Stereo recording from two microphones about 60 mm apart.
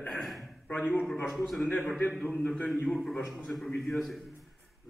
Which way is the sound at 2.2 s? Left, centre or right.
Left.